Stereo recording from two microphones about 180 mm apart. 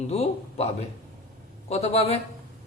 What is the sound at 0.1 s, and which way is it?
Speech, 35° left (ahead or behind).